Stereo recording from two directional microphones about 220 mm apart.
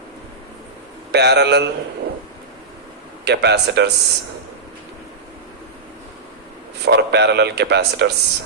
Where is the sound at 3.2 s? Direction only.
50° right (ahead or behind).